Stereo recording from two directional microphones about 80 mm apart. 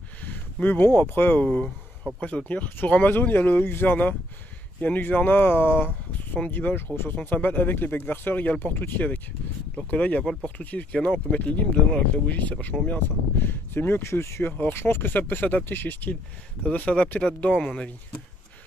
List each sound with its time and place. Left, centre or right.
0.2 s speech: centre